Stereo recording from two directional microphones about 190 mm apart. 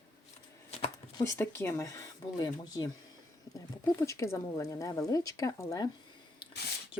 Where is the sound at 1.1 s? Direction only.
15° left (ahead or behind).